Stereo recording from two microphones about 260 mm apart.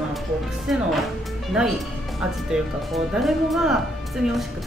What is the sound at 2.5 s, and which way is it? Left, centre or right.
Speech, centre.